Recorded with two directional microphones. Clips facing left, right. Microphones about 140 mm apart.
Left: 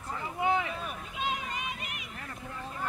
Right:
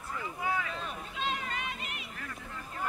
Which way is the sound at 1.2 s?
15° left (ahead or behind).